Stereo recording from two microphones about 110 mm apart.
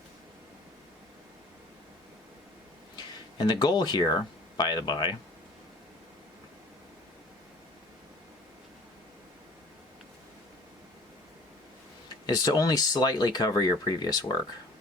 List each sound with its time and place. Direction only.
2.9 s speech: 40° left (ahead or behind)
12.2 s speech: 40° left (ahead or behind)